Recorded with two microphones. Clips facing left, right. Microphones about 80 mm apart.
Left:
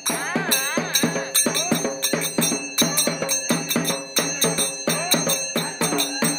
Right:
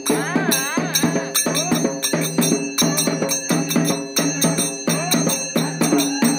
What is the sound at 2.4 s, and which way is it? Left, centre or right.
Music, left.